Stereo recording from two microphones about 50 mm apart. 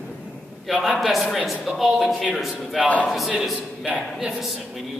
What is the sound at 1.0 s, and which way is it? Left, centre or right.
A man's voice, centre.